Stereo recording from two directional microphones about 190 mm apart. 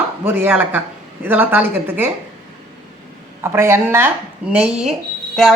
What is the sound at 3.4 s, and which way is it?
A woman's voice, 15° right (ahead or behind).